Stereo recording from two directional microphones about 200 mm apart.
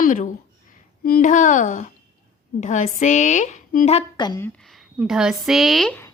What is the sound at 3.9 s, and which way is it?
Speech, 20° left (ahead or behind).